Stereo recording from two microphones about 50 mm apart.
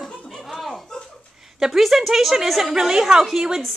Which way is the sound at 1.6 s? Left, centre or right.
Centre.